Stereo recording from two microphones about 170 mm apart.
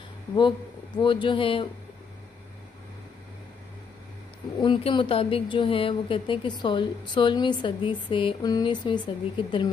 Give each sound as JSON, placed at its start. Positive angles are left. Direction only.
{"t": 0.4, "sound": "a woman's voice", "side_deg": 25}
{"t": 4.6, "sound": "a woman's voice", "side_deg": 30}